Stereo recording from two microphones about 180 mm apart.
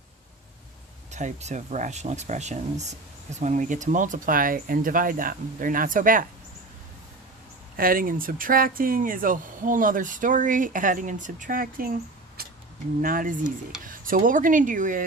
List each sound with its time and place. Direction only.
1.1 s speech: 40° right (ahead or behind)
7.8 s speech: 50° right (ahead or behind)
12.4 s a sound: 60° right (ahead or behind)
13.0 s speech: 50° right (ahead or behind)